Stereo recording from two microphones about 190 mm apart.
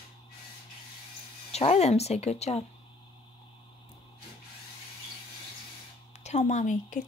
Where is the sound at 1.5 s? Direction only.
35° left (ahead or behind).